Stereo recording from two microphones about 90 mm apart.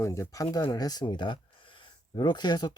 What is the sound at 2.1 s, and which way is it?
Speech, 55° left (ahead or behind).